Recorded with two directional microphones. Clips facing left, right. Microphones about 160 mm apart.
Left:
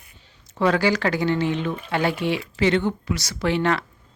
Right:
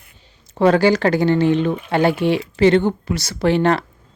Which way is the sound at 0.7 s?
30° right (ahead or behind).